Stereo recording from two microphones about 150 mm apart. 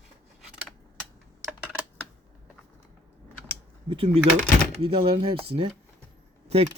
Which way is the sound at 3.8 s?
35° right (ahead or behind).